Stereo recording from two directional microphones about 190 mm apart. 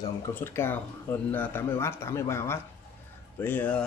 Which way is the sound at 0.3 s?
10° left (ahead or behind).